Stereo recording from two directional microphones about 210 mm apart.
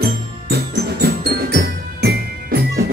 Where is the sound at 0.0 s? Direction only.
50° right (ahead or behind).